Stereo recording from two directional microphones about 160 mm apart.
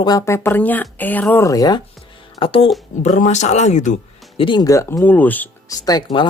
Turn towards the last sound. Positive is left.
turn(degrees=25)  # may be behind; listen again after turning